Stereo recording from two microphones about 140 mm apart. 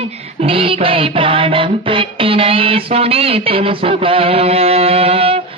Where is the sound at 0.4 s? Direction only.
40° right (ahead or behind).